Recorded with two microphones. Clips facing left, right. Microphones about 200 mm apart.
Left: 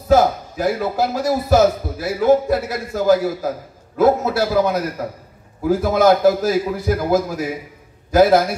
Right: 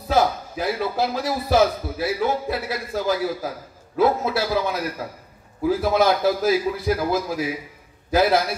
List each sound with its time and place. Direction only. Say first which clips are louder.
0.1 s a man's voice: left 6 dB; 50° left (ahead or behind)